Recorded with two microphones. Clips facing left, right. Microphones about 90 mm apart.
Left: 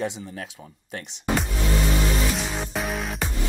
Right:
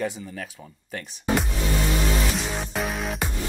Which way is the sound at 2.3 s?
Centre (ahead or behind).